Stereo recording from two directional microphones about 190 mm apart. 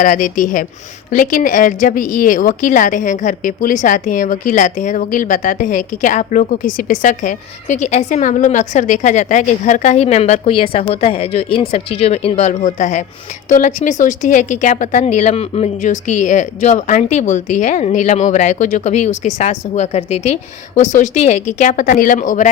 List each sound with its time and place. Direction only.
0.0 s a woman's voice: 45° left (ahead or behind)